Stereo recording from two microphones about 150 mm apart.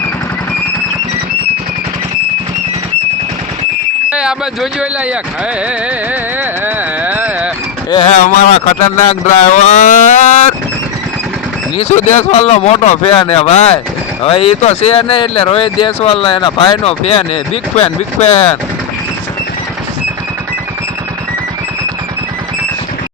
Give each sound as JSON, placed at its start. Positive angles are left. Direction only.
{"t": 4.1, "sound": "speech", "side_deg": -5}
{"t": 6.4, "sound": "a sound", "side_deg": -10}
{"t": 8.1, "sound": "speech", "side_deg": 55}
{"t": 11.8, "sound": "speech", "side_deg": 50}